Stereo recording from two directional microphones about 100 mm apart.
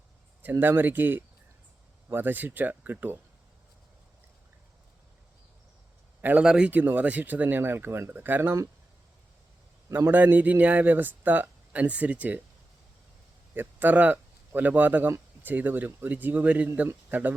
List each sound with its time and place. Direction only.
0.6 s speech: 20° right (ahead or behind)
6.2 s speech: 10° right (ahead or behind)
9.9 s speech: 20° right (ahead or behind)
13.5 s speech: 20° right (ahead or behind)